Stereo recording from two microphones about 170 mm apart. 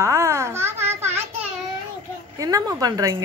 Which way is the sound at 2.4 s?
20° right (ahead or behind).